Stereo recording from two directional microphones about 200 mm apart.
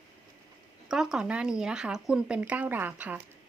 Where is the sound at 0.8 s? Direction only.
Centre (ahead or behind).